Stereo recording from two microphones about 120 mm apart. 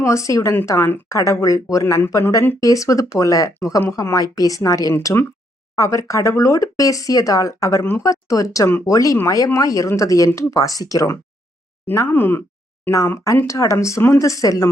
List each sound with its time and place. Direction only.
0.0 s speech: 25° left (ahead or behind)